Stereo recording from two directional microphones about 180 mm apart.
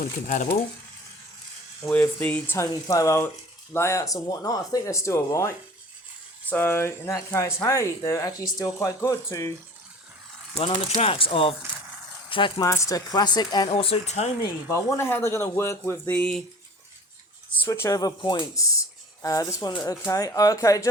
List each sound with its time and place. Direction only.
0.0 s speech: 50° left (ahead or behind)
1.8 s speech: 10° left (ahead or behind)
6.5 s speech: 10° left (ahead or behind)
10.5 s speech: 35° left (ahead or behind)
14.7 s speech: 15° left (ahead or behind)
17.6 s speech: 15° left (ahead or behind)